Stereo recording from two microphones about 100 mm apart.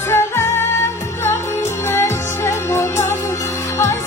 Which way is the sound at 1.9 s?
25° left (ahead or behind).